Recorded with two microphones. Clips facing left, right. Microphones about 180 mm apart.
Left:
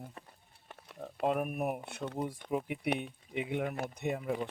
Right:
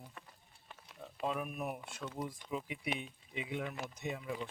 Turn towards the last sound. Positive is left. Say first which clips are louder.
# left 6 dB
turn(degrees=55)  # may be behind; listen again after turning